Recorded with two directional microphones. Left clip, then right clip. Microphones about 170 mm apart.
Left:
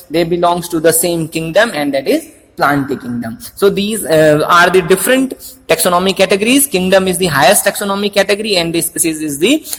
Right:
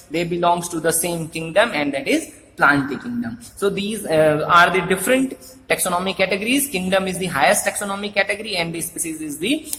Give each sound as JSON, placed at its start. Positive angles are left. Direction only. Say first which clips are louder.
{"t": 0.1, "sound": "a man's voice", "louder": "left 6 dB", "side_deg": 40}